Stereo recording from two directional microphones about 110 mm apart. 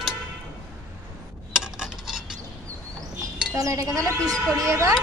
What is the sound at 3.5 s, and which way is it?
A woman's voice, 30° right (ahead or behind).